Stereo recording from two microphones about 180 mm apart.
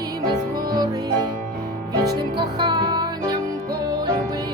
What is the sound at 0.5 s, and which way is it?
Music, 20° right (ahead or behind).